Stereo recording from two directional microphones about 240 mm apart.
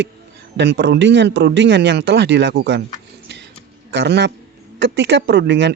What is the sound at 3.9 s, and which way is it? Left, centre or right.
A man's voice, right.